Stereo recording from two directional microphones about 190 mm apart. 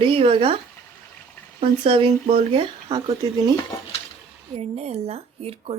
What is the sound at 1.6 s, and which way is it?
Speech, 25° right (ahead or behind).